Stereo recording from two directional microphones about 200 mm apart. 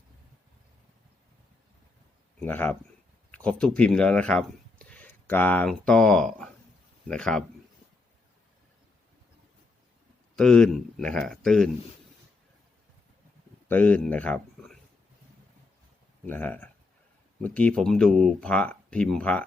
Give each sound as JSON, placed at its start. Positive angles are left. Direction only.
{"t": 2.5, "sound": "speech", "side_deg": 10}
{"t": 10.3, "sound": "speech", "side_deg": 5}
{"t": 13.7, "sound": "speech", "side_deg": 5}
{"t": 16.2, "sound": "speech", "side_deg": 10}